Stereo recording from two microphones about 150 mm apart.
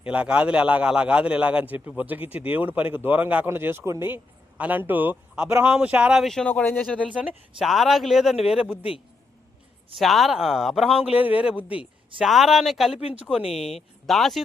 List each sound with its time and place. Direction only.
0.0 s a man's voice: 5° right (ahead or behind); by 7.0 s 10° left (ahead or behind)
7.1 s speech: 10° right (ahead or behind)
10.0 s speech: centre (ahead or behind)
13.4 s speech: 45° left (ahead or behind)
14.1 s speech: centre (ahead or behind)